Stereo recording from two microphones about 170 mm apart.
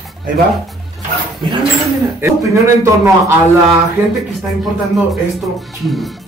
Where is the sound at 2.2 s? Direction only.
15° right (ahead or behind).